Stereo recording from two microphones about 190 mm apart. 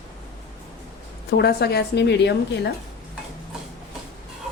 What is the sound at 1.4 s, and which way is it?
A woman's voice, 60° left (ahead or behind).